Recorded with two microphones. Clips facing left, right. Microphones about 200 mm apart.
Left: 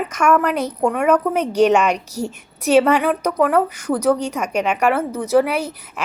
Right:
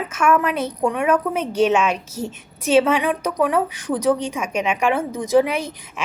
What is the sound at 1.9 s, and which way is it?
Speech, 10° left (ahead or behind).